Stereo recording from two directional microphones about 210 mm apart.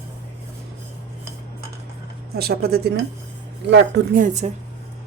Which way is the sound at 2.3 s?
50° right (ahead or behind).